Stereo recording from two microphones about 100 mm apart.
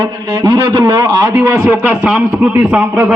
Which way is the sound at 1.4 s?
20° right (ahead or behind).